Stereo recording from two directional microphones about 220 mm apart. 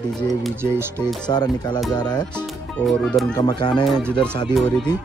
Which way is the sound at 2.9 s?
Centre (ahead or behind).